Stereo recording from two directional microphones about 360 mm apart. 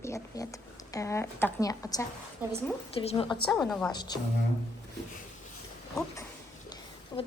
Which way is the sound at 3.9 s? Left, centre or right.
Centre.